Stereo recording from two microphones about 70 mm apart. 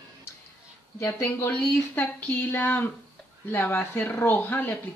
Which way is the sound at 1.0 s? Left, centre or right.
Left.